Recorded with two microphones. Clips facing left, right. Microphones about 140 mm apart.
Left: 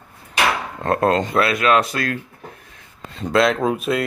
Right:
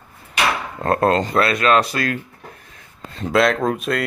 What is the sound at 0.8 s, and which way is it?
Speech, centre (ahead or behind).